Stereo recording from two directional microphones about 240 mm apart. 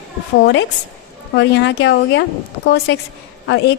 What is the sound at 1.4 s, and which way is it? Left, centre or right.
A woman's voice, left.